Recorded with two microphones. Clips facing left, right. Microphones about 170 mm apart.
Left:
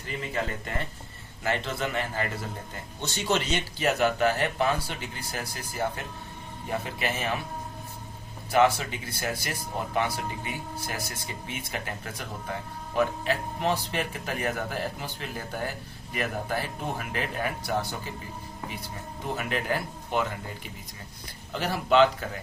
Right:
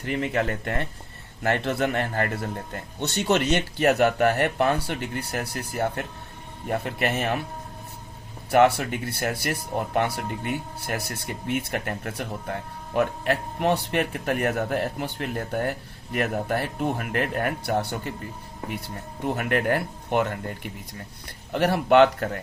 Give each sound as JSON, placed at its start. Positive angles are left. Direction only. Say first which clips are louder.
{"t": 0.0, "sound": "speech", "louder": "right 6 dB", "side_deg": -65}
{"t": 8.4, "sound": "speech", "louder": "right 4 dB", "side_deg": -60}